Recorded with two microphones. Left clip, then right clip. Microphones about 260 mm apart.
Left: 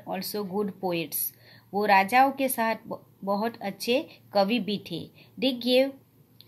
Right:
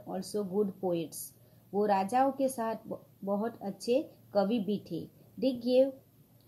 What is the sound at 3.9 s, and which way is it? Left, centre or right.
Speech, left.